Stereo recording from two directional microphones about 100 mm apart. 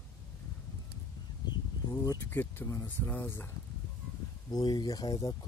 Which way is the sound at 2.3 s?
20° left (ahead or behind).